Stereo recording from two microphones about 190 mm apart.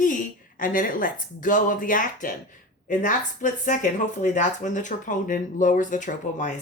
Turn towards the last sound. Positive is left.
turn(degrees=40)  # may be behind; listen again after turning